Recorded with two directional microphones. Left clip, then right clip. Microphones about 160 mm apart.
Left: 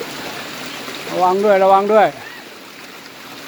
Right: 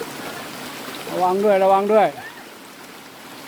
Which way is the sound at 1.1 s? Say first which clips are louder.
Left 4 dB; 5° left (ahead or behind).